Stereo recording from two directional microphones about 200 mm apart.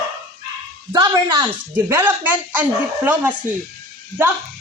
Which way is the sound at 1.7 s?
10° right (ahead or behind).